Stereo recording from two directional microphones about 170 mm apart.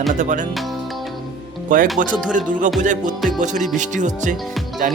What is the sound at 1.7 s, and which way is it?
Speech, 50° right (ahead or behind).